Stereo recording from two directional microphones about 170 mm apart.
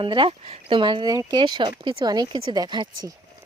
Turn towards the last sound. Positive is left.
turn(degrees=-25)  # may be behind; listen again after turning